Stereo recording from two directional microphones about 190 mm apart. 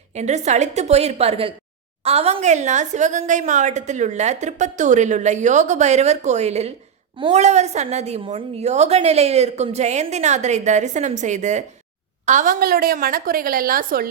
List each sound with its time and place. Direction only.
0.1 s a woman's voice: 35° right (ahead or behind)